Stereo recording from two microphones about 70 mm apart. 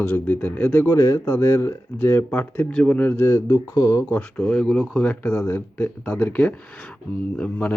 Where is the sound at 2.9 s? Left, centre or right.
Left.